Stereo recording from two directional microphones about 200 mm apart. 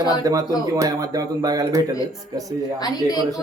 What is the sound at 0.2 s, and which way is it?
Speech, 15° right (ahead or behind).